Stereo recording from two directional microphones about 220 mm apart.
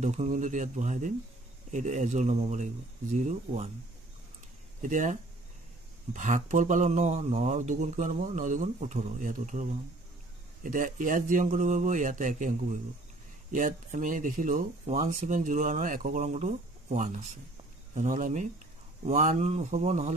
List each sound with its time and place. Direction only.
0.0 s speech: 30° right (ahead or behind)
4.8 s speech: 35° right (ahead or behind)